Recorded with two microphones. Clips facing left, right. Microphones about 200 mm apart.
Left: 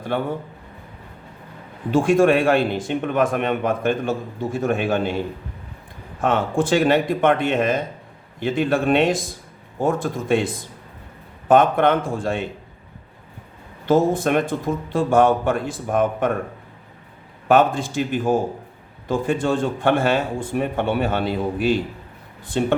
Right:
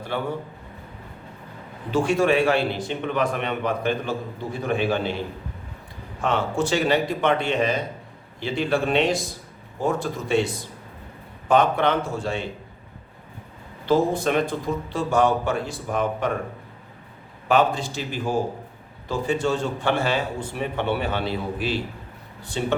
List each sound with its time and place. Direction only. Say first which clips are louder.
1.9 s a man's voice: left 4 dB; 50° left (ahead or behind)
13.8 s a man's voice: left 3 dB; 50° left (ahead or behind)
17.5 s a man's voice: left 4 dB; 50° left (ahead or behind)